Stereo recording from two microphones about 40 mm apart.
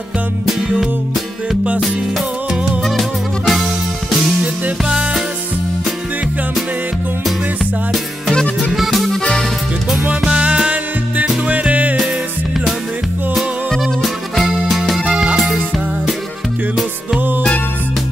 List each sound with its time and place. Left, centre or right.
0.7 s music: centre
2.8 s music: centre
4.8 s music: right
8.7 s accordion: centre
9.2 s music: centre
10.2 s music: right
11.7 s music: right
13.7 s music: centre